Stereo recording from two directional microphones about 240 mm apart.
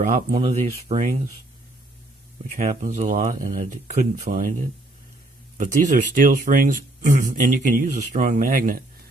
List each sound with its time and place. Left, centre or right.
0.0 s speech: right
2.6 s speech: right
5.5 s speech: right